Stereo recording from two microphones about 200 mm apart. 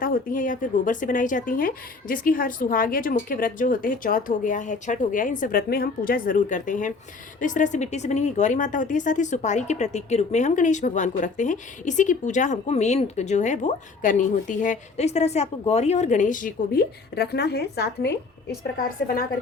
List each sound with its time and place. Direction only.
0.0 s a woman's voice: 45° left (ahead or behind)